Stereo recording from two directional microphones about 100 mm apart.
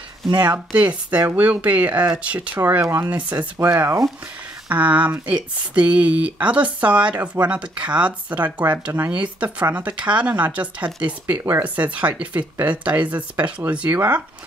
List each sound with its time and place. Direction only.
0.7 s speech: 15° right (ahead or behind)